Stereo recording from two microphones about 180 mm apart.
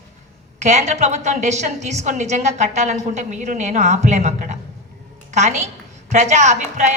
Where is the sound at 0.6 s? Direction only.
40° right (ahead or behind).